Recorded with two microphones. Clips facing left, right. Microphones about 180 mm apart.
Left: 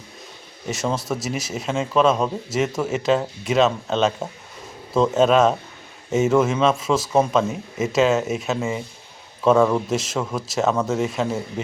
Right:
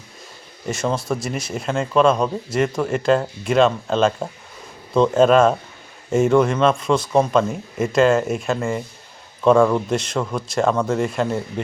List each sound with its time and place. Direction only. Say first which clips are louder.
0.7 s speech: right 2 dB; centre (ahead or behind)